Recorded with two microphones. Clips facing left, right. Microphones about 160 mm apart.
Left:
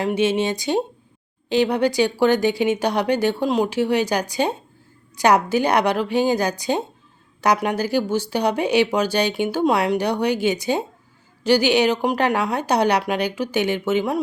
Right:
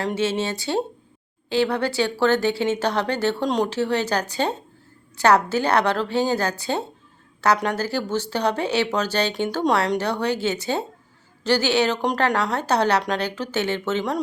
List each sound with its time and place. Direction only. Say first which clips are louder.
0.0 s speech: left 4 dB; 15° left (ahead or behind)